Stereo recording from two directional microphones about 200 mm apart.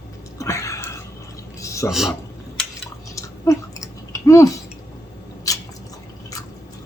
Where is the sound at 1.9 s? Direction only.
Centre (ahead or behind).